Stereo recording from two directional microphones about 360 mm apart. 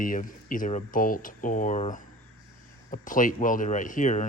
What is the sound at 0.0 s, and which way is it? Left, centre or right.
Speech, left.